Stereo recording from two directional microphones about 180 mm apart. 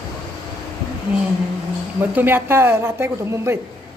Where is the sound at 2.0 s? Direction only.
10° right (ahead or behind).